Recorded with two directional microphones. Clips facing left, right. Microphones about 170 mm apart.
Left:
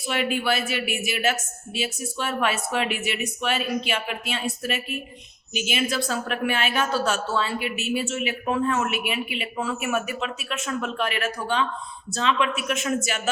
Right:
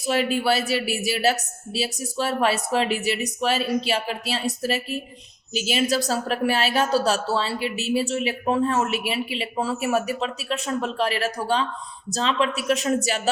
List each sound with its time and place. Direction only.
0.0 s speech: 35° right (ahead or behind)